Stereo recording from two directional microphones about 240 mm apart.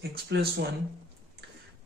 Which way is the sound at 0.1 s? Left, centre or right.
Right.